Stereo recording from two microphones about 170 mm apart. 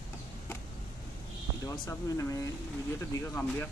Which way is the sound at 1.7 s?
20° left (ahead or behind).